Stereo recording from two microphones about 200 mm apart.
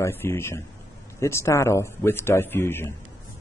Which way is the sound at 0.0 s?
10° left (ahead or behind).